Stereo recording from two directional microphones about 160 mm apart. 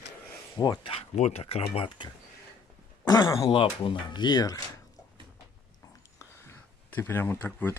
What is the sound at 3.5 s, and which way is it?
Speech, 30° left (ahead or behind).